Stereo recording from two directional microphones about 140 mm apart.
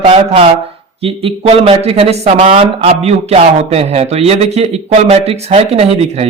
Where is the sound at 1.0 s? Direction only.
45° right (ahead or behind).